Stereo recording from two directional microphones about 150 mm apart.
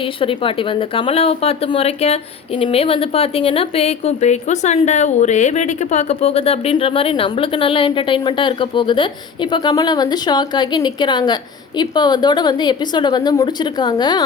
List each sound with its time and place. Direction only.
0.2 s speech: 35° left (ahead or behind)